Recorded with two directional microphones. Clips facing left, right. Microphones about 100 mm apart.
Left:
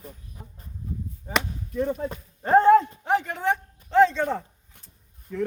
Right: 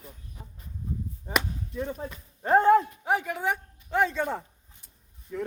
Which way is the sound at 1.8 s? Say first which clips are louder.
Left 7 dB; 45° left (ahead or behind).